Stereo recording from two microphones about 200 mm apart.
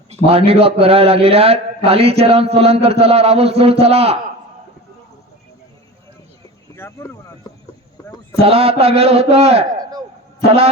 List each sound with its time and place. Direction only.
0.1 s a man's voice: 30° right (ahead or behind)
6.7 s speech: 10° left (ahead or behind)
8.0 s a sound: 15° left (ahead or behind)
8.4 s a man's voice: 30° right (ahead or behind)